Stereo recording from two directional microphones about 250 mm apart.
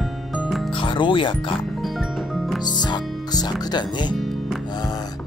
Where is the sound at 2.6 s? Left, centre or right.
Centre.